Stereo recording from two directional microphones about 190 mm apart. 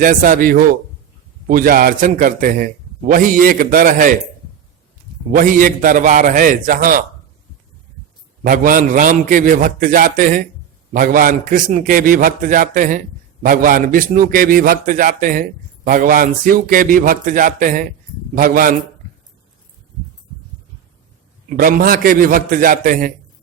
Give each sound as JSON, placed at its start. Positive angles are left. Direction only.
{"t": 0.0, "sound": "a man's voice", "side_deg": -45}
{"t": 5.3, "sound": "a man's voice", "side_deg": -45}
{"t": 8.4, "sound": "a man's voice", "side_deg": -45}
{"t": 21.5, "sound": "a man's voice", "side_deg": -50}